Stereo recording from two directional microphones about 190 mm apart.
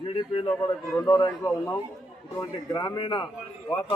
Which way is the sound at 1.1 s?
20° left (ahead or behind).